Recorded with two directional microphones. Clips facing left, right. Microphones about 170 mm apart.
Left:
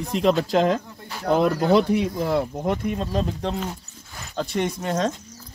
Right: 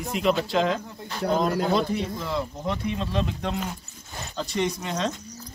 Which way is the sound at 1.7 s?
60° left (ahead or behind).